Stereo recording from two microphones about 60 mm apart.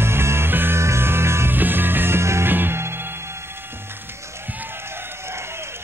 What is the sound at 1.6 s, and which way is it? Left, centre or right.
Music, right.